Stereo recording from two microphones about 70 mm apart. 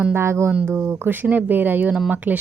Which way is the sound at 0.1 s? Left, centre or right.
Right.